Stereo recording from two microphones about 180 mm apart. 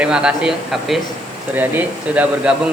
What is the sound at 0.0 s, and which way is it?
Speech, 5° right (ahead or behind).